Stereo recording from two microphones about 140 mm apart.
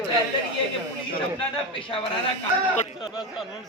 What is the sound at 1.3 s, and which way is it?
Speech, 40° left (ahead or behind).